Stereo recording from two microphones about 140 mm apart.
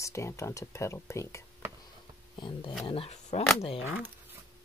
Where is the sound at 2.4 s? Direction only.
35° left (ahead or behind).